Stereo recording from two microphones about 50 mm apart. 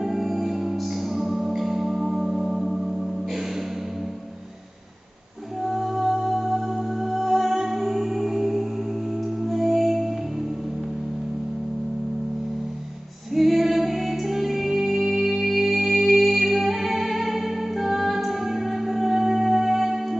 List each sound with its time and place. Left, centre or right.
0.0 s music: centre
5.6 s music: centre
13.3 s music: centre